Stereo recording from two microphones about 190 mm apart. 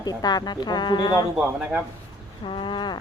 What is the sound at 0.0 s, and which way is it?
Speech, 20° left (ahead or behind).